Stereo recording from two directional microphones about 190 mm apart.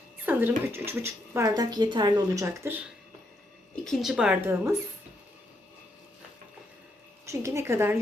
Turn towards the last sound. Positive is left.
turn(degrees=-15)  # may be behind; listen again after turning